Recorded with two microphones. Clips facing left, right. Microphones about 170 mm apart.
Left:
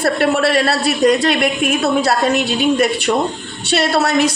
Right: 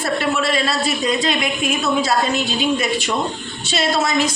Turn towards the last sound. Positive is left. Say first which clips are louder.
# left 4 dB
turn(degrees=70)  # may be behind; listen again after turning